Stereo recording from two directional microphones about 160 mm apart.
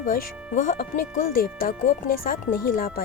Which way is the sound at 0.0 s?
60° left (ahead or behind).